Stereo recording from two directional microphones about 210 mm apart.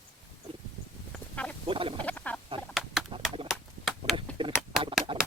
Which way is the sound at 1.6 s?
25° right (ahead or behind).